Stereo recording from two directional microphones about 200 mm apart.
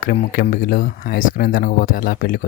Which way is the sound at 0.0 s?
45° left (ahead or behind).